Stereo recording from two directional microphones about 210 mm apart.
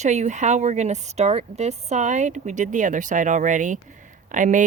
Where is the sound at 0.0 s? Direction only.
35° right (ahead or behind).